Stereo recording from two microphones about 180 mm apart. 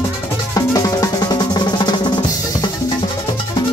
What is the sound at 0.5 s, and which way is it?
Drum, 20° left (ahead or behind).